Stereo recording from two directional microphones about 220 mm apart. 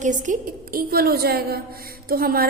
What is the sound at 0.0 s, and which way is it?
A woman's voice, 35° right (ahead or behind).